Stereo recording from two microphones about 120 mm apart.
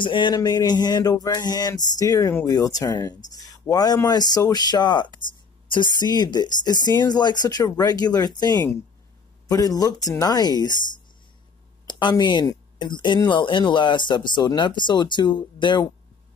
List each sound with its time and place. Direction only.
0.0 s speech: 40° left (ahead or behind)
11.9 s speech: 40° left (ahead or behind)